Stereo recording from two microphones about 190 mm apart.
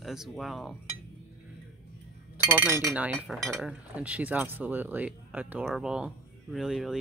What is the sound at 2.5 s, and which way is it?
Speech, 10° right (ahead or behind).